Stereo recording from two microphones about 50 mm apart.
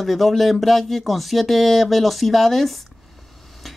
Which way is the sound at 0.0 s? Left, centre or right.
Centre.